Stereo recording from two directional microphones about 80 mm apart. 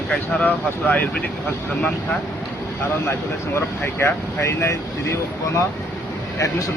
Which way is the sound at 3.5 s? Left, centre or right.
Left.